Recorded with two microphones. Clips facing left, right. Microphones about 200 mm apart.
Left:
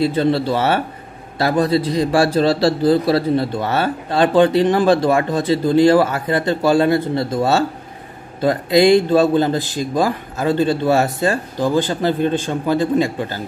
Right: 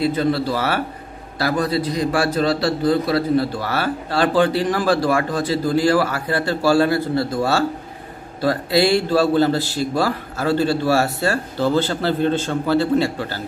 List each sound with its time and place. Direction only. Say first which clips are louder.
0.0 s a man's voice: left 2 dB; 25° left (ahead or behind)